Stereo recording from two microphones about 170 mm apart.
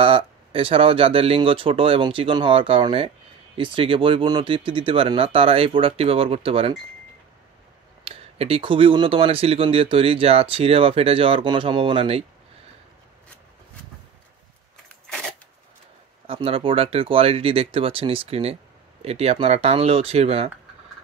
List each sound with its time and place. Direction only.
0.0 s speech: 30° right (ahead or behind)
8.0 s speech: 35° right (ahead or behind)
16.3 s speech: 35° right (ahead or behind)